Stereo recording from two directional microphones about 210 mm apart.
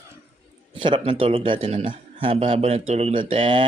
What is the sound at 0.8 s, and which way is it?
A man's voice, 25° right (ahead or behind).